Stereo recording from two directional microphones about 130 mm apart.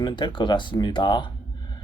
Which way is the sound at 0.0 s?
35° left (ahead or behind).